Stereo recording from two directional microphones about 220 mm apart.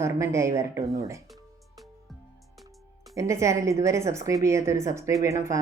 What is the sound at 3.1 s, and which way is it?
Speech, 15° right (ahead or behind).